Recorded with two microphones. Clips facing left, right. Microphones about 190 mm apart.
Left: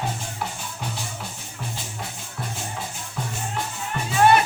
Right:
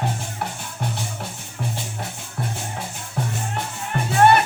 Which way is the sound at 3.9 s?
60° right (ahead or behind).